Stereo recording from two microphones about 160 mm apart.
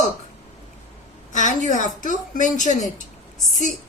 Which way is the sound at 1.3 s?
50° left (ahead or behind).